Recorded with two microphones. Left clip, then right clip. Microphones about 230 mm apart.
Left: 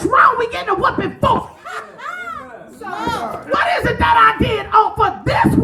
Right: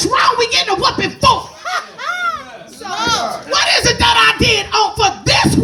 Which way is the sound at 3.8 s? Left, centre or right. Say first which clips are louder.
Left 1 dB; right.